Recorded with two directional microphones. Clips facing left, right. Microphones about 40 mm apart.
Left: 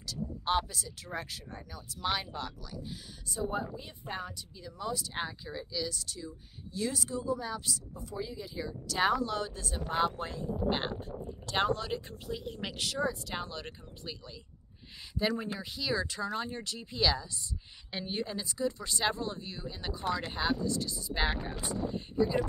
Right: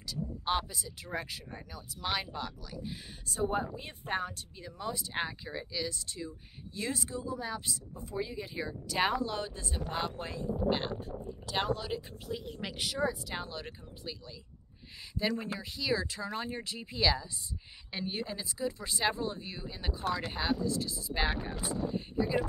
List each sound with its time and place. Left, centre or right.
0.0 s speech: centre
3.3 s speech: right
4.7 s speech: centre
9.8 s speech: centre
10.7 s speech: centre